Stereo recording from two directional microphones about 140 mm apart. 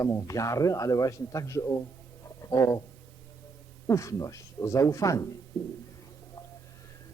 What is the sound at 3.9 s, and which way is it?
Speech, 20° left (ahead or behind).